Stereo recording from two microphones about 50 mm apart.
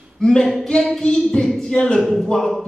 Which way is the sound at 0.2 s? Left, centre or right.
Centre.